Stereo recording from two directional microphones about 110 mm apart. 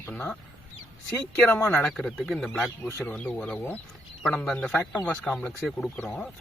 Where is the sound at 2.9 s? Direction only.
25° left (ahead or behind).